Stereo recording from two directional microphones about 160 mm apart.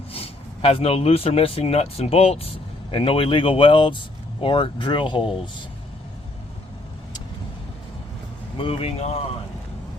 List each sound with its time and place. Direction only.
0.1 s speech: 40° left (ahead or behind)
8.5 s speech: 35° left (ahead or behind)